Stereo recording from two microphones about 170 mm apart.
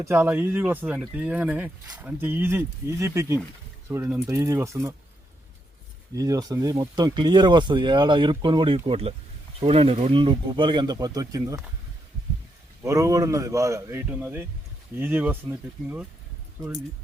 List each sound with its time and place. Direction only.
0.0 s speech: 15° right (ahead or behind)
6.1 s speech: 20° right (ahead or behind)
12.8 s speech: 20° right (ahead or behind)